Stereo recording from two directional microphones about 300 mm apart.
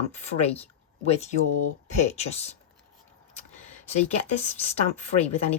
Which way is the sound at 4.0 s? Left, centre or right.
Left.